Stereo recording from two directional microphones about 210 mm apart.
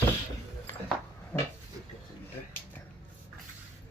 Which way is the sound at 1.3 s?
5° left (ahead or behind).